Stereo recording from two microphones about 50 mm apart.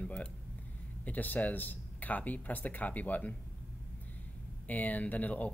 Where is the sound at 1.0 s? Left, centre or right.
Left.